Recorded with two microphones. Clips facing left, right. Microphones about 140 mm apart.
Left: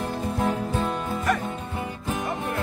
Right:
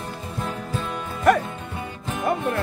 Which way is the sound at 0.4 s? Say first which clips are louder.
Left 4 dB; 40° left (ahead or behind).